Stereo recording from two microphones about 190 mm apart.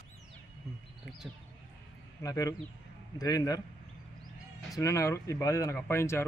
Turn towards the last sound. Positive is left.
turn(degrees=15)  # may be behind; listen again after turning